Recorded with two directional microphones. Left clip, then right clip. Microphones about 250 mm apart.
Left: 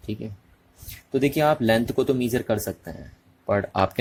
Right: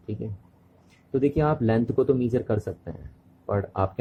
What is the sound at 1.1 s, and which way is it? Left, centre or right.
Speech, left.